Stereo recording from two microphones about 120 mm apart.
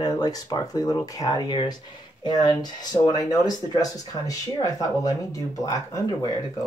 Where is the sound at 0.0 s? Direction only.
30° left (ahead or behind).